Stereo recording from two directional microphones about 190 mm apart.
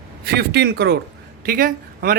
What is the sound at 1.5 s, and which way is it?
Speech, 50° right (ahead or behind).